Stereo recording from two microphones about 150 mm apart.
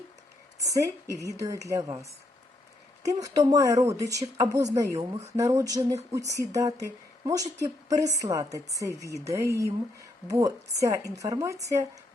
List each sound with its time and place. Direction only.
0.6 s a woman's voice: 20° right (ahead or behind)
3.0 s a woman's voice: 20° right (ahead or behind)